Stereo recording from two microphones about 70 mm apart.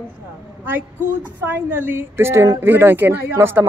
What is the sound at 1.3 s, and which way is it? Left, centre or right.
Speech, right.